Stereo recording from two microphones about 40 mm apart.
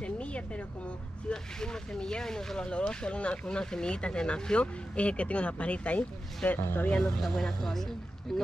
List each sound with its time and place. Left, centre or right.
0.0 s a sound: left
1.3 s speech: centre
2.6 s speech: left
6.6 s speech: left
7.2 s speech: centre